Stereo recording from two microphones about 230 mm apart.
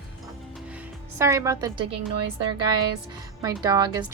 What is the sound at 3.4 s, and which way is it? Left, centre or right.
Speech, centre.